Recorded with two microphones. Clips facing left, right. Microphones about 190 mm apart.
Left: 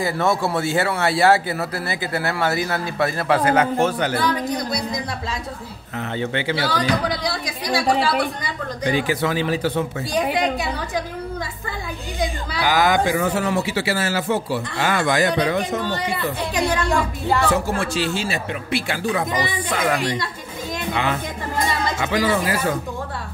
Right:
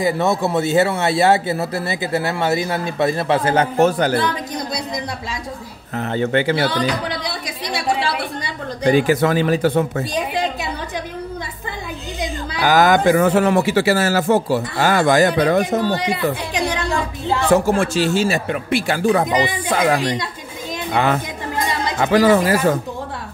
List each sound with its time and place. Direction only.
0.0 s a man's voice: 20° right (ahead or behind); by 4.2 s 40° right (ahead or behind)
6.1 s speech: 45° right (ahead or behind)
8.8 s speech: 45° right (ahead or behind)
12.6 s speech: 45° right (ahead or behind)
15.9 s speech: 15° right (ahead or behind)
17.5 s speech: 50° right (ahead or behind)
20.9 s speech: 45° right (ahead or behind)